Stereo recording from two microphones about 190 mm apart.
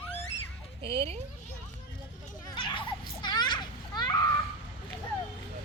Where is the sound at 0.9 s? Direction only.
30° right (ahead or behind).